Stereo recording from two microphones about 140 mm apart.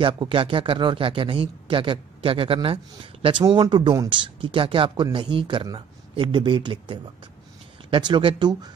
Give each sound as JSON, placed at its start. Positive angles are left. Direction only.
{"t": 0.0, "sound": "speech", "side_deg": -35}